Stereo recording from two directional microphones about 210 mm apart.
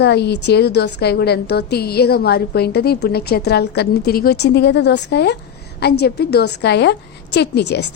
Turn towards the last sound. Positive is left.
turn(degrees=50)  # may be behind; listen again after turning